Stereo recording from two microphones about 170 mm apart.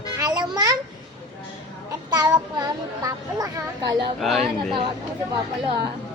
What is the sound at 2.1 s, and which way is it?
A child's voice, 20° right (ahead or behind).